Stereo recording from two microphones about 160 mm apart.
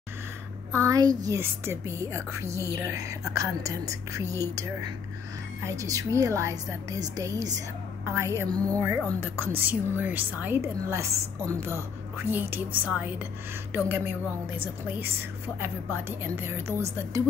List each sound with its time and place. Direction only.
0.7 s a woman's voice: 20° right (ahead or behind)
15.6 s a woman's voice: 15° right (ahead or behind)